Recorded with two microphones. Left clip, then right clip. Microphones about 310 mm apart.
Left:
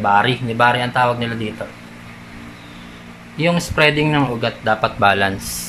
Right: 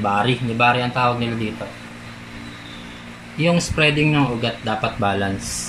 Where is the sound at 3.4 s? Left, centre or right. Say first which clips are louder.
Left 3 dB; left.